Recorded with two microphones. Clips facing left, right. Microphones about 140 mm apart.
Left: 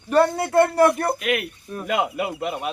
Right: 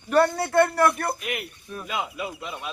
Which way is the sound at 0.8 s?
25° left (ahead or behind).